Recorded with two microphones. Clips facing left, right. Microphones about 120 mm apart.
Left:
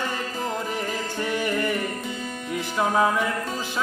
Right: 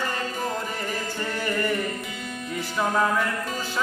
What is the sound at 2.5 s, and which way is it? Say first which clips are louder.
Speech: left 2 dB; 15° left (ahead or behind).